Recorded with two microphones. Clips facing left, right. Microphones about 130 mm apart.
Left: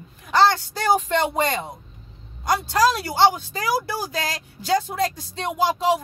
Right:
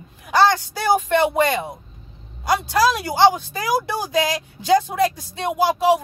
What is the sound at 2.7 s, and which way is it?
Speech, 10° right (ahead or behind).